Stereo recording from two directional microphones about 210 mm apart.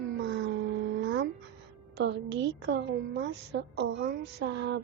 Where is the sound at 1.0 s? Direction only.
60° right (ahead or behind).